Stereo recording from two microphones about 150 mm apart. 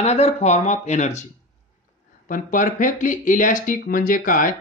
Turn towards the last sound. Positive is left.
turn(degrees=65)  # may be behind; listen again after turning